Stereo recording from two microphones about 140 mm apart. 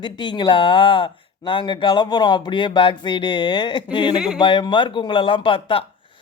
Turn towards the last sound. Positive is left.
turn(degrees=40)  # may be behind; listen again after turning